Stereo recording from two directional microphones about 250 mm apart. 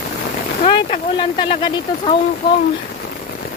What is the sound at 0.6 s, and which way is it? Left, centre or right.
Speech, left.